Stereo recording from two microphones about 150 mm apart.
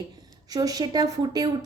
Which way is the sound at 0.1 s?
25° right (ahead or behind).